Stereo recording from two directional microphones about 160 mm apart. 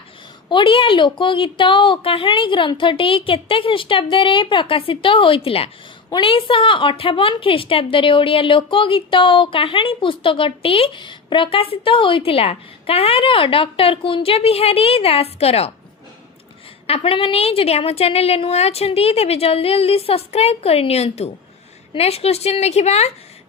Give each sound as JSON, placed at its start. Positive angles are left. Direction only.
{"t": 0.5, "sound": "a woman's voice", "side_deg": 30}
{"t": 16.8, "sound": "a woman's voice", "side_deg": 35}